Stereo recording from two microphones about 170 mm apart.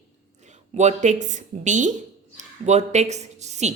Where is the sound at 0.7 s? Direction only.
45° right (ahead or behind).